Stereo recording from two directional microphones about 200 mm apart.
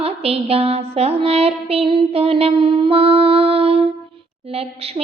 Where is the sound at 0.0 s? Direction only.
30° right (ahead or behind).